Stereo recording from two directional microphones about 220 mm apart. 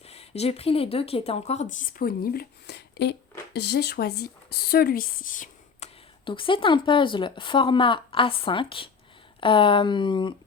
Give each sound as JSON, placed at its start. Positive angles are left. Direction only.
{"t": 0.0, "sound": "speech", "side_deg": 30}
{"t": 6.2, "sound": "a woman's voice", "side_deg": 25}